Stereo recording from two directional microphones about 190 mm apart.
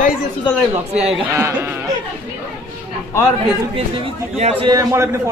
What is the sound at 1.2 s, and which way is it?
Speech, 10° right (ahead or behind).